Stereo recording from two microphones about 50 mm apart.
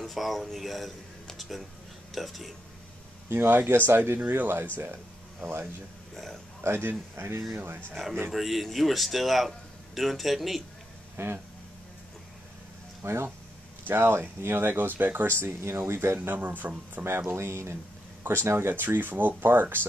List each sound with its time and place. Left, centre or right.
0.0 s speech: centre
1.2 s music: centre
2.1 s speech: centre
3.3 s speech: right
4.2 s speech: right
6.6 s speech: right
7.5 s speech: right
7.9 s speech: centre
11.1 s speech: right
13.0 s speech: right
15.3 s speech: right
16.3 s speech: right
17.4 s speech: right